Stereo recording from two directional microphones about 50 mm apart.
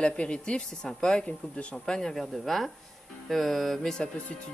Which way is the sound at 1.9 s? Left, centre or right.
Centre.